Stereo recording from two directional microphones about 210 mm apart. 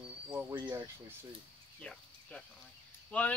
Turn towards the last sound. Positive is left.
turn(degrees=5)  # may be behind; listen again after turning